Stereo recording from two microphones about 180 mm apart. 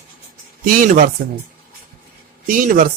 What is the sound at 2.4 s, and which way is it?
Speech, 50° right (ahead or behind).